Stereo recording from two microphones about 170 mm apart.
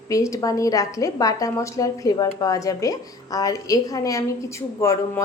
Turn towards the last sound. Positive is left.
turn(degrees=20)  # may be behind; listen again after turning